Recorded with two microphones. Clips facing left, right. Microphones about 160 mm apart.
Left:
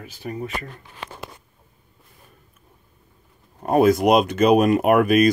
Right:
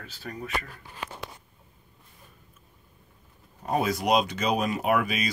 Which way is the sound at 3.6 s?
55° left (ahead or behind).